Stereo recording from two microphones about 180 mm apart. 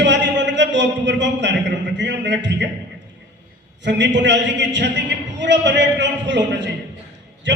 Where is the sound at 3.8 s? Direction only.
80° right.